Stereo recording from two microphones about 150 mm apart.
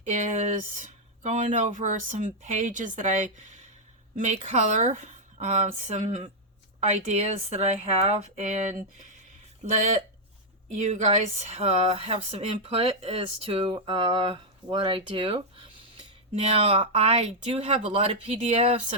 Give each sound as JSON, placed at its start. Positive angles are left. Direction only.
{"t": 0.0, "sound": "speech", "side_deg": -55}
{"t": 10.8, "sound": "speech", "side_deg": -50}